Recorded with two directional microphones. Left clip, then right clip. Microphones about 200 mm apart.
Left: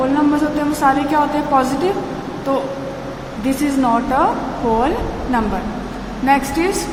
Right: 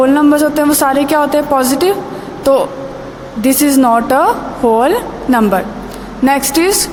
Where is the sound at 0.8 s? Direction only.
50° right (ahead or behind).